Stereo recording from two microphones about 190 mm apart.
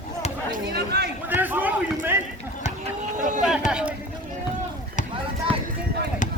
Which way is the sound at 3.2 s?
40° right (ahead or behind).